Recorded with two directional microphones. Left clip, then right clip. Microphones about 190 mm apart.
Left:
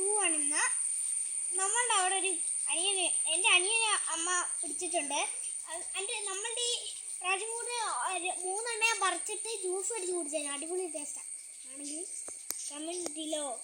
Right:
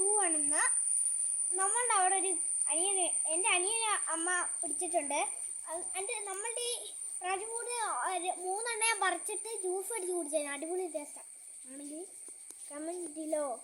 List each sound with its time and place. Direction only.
0.2 s a sound: 10° right (ahead or behind)
1.5 s a child's voice: 10° right (ahead or behind)
12.7 s a child's voice: 25° right (ahead or behind)